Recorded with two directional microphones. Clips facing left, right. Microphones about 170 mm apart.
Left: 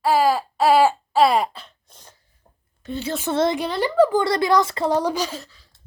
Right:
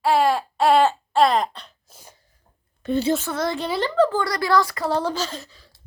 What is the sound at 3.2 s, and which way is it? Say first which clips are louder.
Speech: left 5 dB; 20° left (ahead or behind).